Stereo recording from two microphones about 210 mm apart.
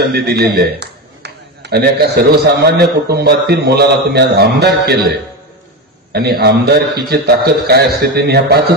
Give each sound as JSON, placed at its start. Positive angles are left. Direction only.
{"t": 0.0, "sound": "a man's voice", "side_deg": -45}
{"t": 6.1, "sound": "a man's voice", "side_deg": -50}